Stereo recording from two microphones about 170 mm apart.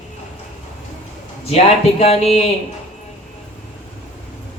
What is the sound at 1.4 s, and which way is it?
Speech, 35° left (ahead or behind).